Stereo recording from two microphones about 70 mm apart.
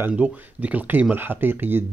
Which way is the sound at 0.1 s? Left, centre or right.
Right.